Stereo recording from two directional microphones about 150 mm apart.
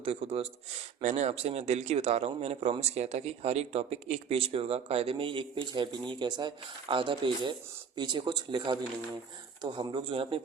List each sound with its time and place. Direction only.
0.0 s speech: 40° right (ahead or behind)